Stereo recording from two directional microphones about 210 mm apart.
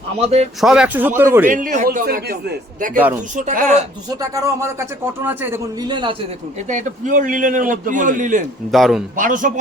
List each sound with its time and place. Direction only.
0.2 s a man's voice: 30° right (ahead or behind)
0.6 s a man's voice: 5° right (ahead or behind)
1.5 s a man's voice: 40° right (ahead or behind)
4.1 s a man's voice: 15° right (ahead or behind)
5.9 s a man's voice: 20° right (ahead or behind)
6.7 s a man's voice: 35° right (ahead or behind)
8.7 s speech: centre (ahead or behind)
9.1 s a man's voice: 40° right (ahead or behind)